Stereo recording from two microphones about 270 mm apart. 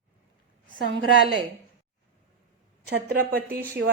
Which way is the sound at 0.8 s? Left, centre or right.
Right.